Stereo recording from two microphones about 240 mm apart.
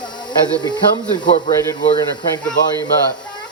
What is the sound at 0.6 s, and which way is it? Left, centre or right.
Speech, centre.